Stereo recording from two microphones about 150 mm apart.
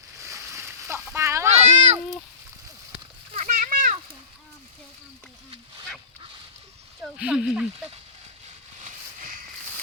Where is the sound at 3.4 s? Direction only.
55° right (ahead or behind).